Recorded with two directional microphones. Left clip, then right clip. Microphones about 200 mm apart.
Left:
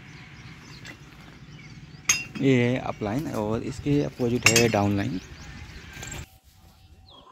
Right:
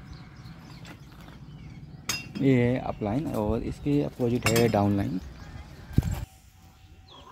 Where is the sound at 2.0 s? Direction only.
25° right (ahead or behind).